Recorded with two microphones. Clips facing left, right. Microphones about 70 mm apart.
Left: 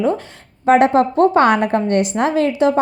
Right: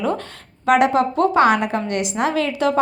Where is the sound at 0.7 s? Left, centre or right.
Left.